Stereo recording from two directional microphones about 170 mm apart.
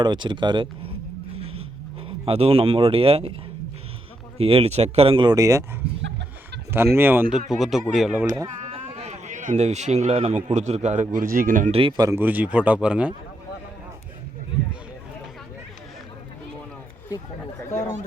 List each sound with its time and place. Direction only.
0.0 s speech: 25° right (ahead or behind)
2.0 s speech: 35° right (ahead or behind)
4.4 s speech: 35° right (ahead or behind)
6.0 s a sound: 90° right
6.7 s speech: 15° right (ahead or behind)
8.6 s speech: 40° right (ahead or behind)
11.7 s speech: 30° right (ahead or behind); by 13.1 s 5° right (ahead or behind)